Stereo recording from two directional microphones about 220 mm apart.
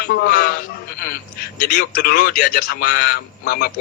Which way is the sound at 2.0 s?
45° left (ahead or behind).